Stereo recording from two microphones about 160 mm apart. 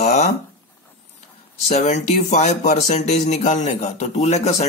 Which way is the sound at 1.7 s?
45° left (ahead or behind).